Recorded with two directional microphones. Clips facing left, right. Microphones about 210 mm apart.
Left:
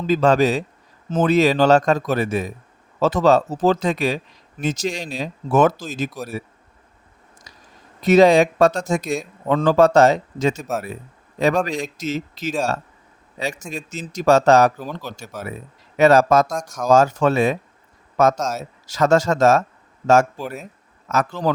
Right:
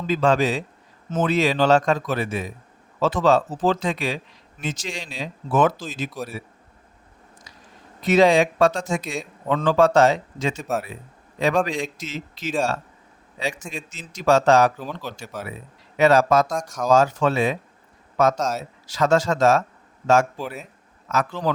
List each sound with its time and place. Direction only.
0.1 s speech: 40° left (ahead or behind)
8.0 s speech: 40° left (ahead or behind)
10.6 s speech: centre (ahead or behind)
11.3 s speech: 40° left (ahead or behind)
14.8 s speech: 5° left (ahead or behind)
16.0 s speech: 45° left (ahead or behind)
16.5 s speech: 5° right (ahead or behind)
16.9 s speech: 45° left (ahead or behind)
18.3 s speech: 5° left (ahead or behind)
18.9 s speech: 45° left (ahead or behind)
21.1 s speech: 45° left (ahead or behind)